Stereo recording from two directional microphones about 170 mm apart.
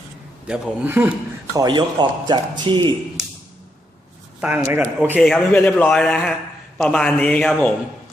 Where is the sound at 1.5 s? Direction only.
25° right (ahead or behind).